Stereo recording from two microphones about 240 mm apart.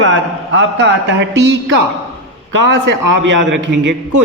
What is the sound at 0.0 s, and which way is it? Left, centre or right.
A man's voice, right.